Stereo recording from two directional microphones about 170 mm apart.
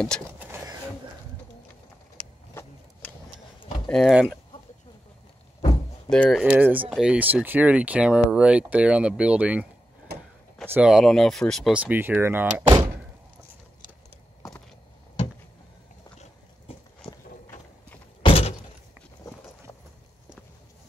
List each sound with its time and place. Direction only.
0.4 s a sound: 15° right (ahead or behind)
3.8 s speech: centre (ahead or behind)
6.0 s speech: 5° left (ahead or behind)
6.5 s speech: 10° right (ahead or behind)
10.7 s speech: 5° right (ahead or behind)
18.2 s a sound: 35° left (ahead or behind)